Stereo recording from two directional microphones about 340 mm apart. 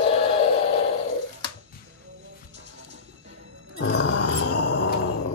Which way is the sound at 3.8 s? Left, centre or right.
Left.